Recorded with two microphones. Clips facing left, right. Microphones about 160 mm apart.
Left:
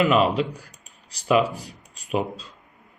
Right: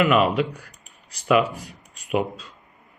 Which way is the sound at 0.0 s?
30° left (ahead or behind).